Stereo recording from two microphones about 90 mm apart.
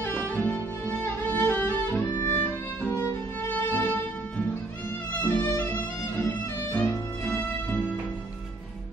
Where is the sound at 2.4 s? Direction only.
30° left (ahead or behind).